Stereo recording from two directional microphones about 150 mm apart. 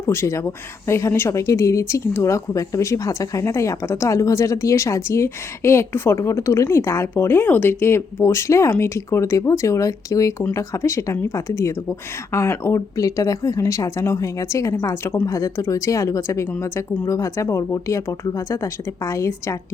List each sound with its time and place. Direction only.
0.0 s speech: 20° left (ahead or behind)